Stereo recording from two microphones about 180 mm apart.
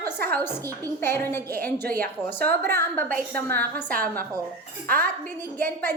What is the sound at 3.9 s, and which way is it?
A woman's voice, 50° right (ahead or behind).